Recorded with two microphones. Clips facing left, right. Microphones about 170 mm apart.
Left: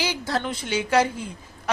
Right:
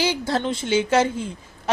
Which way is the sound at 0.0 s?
25° right (ahead or behind).